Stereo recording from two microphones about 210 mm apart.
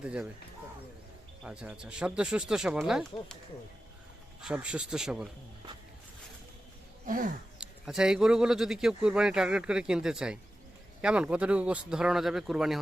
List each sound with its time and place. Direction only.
0.0 s speech: 5° right (ahead or behind)
1.5 s speech: 5° right (ahead or behind)
4.4 s speech: 5° right (ahead or behind)
7.0 s a sound: 40° right (ahead or behind)
7.6 s speech: 5° right (ahead or behind)